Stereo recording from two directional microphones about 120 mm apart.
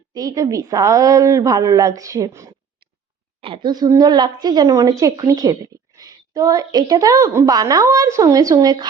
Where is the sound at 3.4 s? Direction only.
45° right (ahead or behind).